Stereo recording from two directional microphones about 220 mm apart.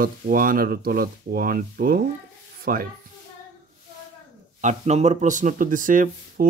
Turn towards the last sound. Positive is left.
turn(degrees=-35)  # may be behind; listen again after turning